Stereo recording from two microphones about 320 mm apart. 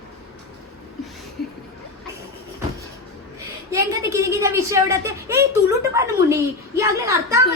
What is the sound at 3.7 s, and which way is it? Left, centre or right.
A woman's voice, centre.